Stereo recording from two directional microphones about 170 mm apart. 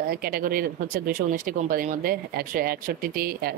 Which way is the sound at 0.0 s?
60° right (ahead or behind).